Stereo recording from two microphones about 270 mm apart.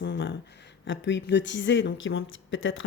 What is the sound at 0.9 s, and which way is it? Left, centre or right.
Speech, left.